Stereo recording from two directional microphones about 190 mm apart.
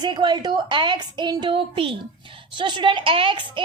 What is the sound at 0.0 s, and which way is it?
A woman's voice, 25° right (ahead or behind).